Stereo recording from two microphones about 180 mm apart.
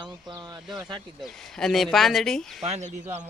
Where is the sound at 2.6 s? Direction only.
35° right (ahead or behind).